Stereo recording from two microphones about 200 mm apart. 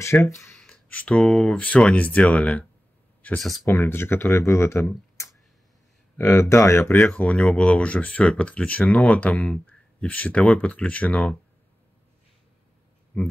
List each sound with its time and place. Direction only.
0.0 s speech: 15° left (ahead or behind)
13.1 s speech: 5° left (ahead or behind)